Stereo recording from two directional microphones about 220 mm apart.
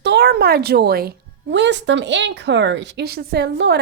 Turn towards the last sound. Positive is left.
turn(degrees=-50)  # may be behind; listen again after turning